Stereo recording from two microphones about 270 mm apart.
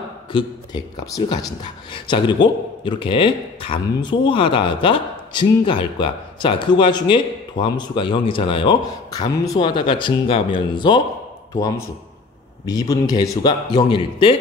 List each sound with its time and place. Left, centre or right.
0.3 s speech: centre